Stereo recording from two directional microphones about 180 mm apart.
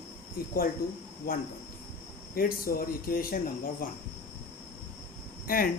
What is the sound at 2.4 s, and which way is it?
Speech, 55° left (ahead or behind).